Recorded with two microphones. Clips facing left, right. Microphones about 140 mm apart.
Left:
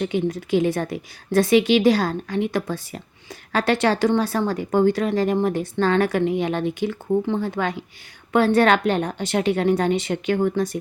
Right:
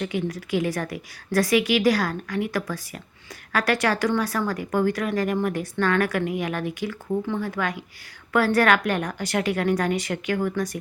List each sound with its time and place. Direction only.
0.0 s speech: 25° left (ahead or behind)